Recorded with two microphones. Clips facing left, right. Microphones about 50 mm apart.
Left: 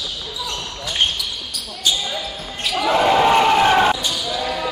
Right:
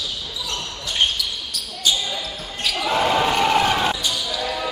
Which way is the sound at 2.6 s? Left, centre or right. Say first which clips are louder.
Left 3 dB; left.